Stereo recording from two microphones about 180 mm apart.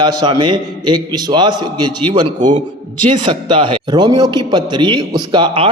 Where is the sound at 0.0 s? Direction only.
25° right (ahead or behind).